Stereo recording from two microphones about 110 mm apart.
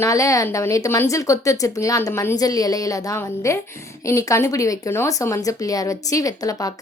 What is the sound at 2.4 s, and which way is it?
Speech, 35° left (ahead or behind).